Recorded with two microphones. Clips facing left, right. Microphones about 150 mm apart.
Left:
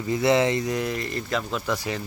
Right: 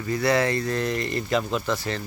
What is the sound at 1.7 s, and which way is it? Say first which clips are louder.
Speech: even; 10° left (ahead or behind).